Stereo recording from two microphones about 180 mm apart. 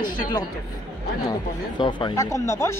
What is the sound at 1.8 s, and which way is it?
Speech, 25° left (ahead or behind).